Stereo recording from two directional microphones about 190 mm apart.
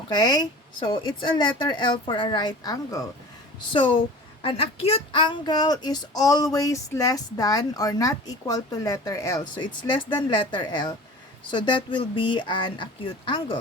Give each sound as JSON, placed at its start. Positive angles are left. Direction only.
{"t": 0.1, "sound": "speech", "side_deg": 20}